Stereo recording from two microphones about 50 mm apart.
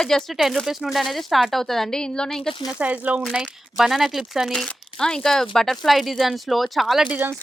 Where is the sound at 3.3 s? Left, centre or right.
Centre.